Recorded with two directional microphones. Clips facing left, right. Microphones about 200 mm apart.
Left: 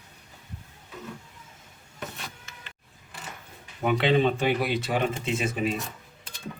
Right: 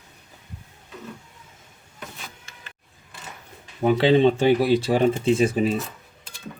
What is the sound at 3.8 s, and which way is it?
Speech, 30° right (ahead or behind).